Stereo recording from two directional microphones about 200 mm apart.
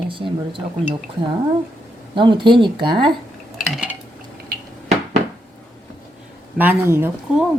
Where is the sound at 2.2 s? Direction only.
25° right (ahead or behind).